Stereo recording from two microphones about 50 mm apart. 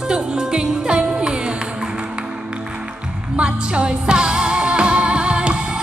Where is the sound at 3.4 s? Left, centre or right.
Centre.